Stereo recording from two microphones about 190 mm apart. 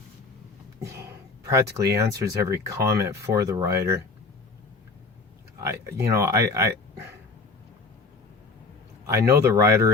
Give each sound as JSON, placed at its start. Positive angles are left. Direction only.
{"t": 1.5, "sound": "speech", "side_deg": -15}
{"t": 5.5, "sound": "speech", "side_deg": -15}
{"t": 9.0, "sound": "speech", "side_deg": -15}